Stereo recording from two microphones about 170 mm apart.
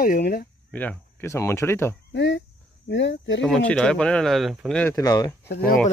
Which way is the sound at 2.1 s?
90° left.